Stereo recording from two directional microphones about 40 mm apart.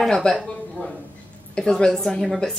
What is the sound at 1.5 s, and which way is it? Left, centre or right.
Speech, centre.